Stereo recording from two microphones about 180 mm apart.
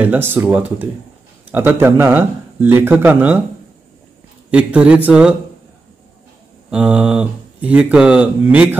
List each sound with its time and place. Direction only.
0.0 s speech: 10° right (ahead or behind)
4.5 s speech: 5° right (ahead or behind)
6.7 s speech: 5° right (ahead or behind)